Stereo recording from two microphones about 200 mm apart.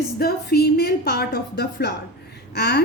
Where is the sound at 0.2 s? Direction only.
50° left (ahead or behind).